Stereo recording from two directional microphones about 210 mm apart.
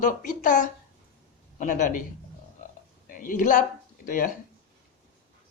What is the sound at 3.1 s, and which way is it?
Speech, 40° left (ahead or behind).